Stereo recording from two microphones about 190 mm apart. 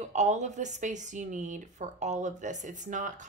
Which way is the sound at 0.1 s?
40° right (ahead or behind).